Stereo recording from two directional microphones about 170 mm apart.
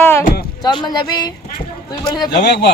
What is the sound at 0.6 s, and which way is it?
A man's voice, 25° left (ahead or behind).